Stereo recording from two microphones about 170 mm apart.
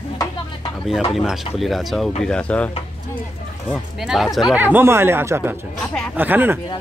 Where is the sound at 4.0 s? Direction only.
5° right (ahead or behind).